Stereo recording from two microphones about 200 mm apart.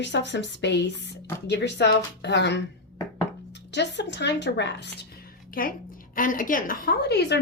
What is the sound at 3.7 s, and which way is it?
A woman's voice, 60° left (ahead or behind).